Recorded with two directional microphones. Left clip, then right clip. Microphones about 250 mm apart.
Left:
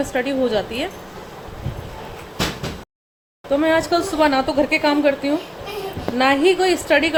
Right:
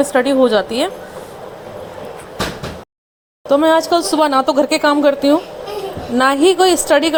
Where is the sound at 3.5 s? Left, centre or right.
Right.